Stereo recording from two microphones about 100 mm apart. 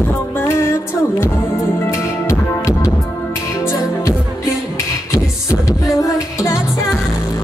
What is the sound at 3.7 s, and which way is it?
Music, 30° left (ahead or behind).